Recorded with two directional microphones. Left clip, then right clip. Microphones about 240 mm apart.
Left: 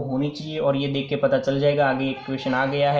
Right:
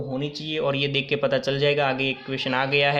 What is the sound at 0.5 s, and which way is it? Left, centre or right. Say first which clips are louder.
Speech: left 1 dB; right.